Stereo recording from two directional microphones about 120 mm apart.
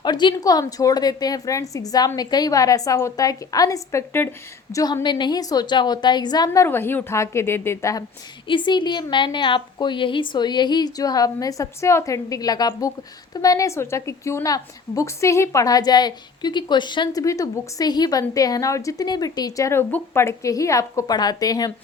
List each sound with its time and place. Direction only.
0.0 s a woman's voice: 40° left (ahead or behind); by 4.8 s 20° left (ahead or behind)
5.0 s a woman's voice: 40° left (ahead or behind)
6.7 s a woman's voice: 15° left (ahead or behind)
8.4 s a woman's voice: 40° left (ahead or behind)
17.2 s a woman's voice: 30° left (ahead or behind)